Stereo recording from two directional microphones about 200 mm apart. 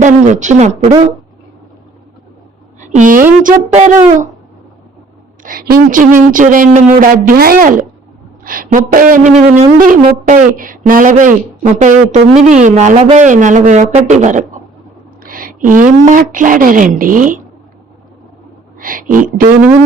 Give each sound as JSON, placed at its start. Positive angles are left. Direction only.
{"t": 0.0, "sound": "speech", "side_deg": -35}
{"t": 2.9, "sound": "speech", "side_deg": -40}
{"t": 5.4, "sound": "a woman's voice", "side_deg": -45}
{"t": 18.8, "sound": "speech", "side_deg": -45}